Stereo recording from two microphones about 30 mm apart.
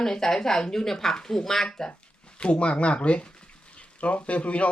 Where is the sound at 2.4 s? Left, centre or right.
Left.